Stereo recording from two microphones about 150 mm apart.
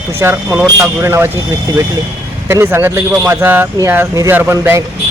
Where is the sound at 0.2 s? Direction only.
15° right (ahead or behind).